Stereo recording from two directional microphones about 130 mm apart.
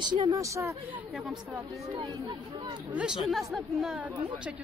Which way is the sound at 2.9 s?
5° right (ahead or behind).